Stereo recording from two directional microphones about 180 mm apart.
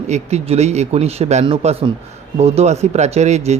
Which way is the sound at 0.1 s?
35° right (ahead or behind).